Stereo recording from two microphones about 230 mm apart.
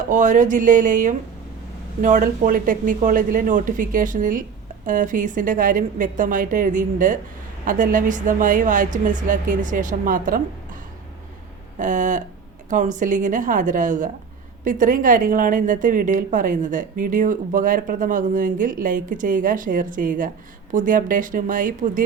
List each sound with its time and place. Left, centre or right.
0.1 s a woman's voice: right
11.8 s a woman's voice: right